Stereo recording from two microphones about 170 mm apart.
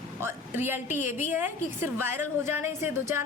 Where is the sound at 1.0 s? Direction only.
45° left (ahead or behind).